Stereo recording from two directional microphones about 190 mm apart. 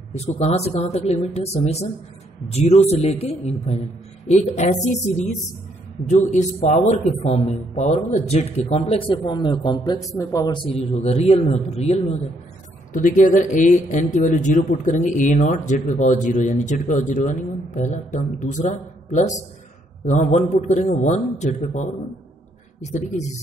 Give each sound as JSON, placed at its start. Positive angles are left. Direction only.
{"t": 0.1, "sound": "speech", "side_deg": 35}
{"t": 22.8, "sound": "speech", "side_deg": 35}